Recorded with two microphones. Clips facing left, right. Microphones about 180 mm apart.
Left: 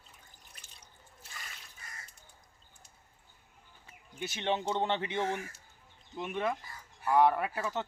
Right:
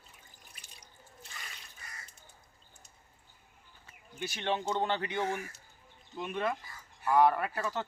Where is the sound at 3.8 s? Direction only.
20° left (ahead or behind).